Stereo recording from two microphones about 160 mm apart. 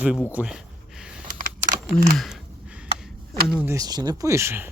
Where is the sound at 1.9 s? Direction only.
Centre (ahead or behind).